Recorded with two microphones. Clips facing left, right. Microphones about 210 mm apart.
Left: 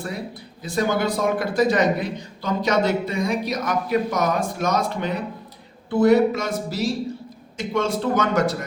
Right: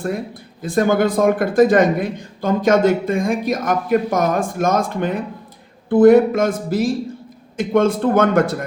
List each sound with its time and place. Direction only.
0.6 s a man's voice: 50° right (ahead or behind)